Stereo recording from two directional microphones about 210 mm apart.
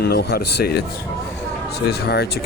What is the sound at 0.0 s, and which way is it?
Speech, 50° left (ahead or behind).